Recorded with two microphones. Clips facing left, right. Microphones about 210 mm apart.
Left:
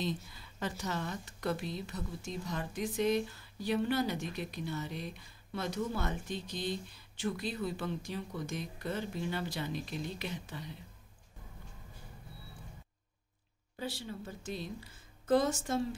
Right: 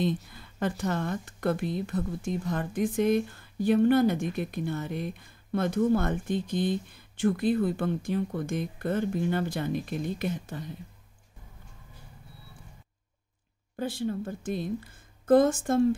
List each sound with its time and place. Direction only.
0.3 s a woman's voice: 55° right (ahead or behind)
13.7 s a woman's voice: 50° right (ahead or behind)